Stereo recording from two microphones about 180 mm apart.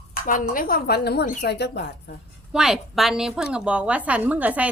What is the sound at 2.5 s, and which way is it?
A woman's voice, centre (ahead or behind).